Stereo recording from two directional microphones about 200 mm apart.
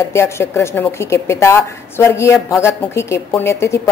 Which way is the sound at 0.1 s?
15° left (ahead or behind).